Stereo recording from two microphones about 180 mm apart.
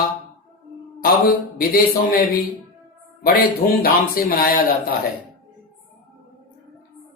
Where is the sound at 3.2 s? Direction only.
55° left (ahead or behind).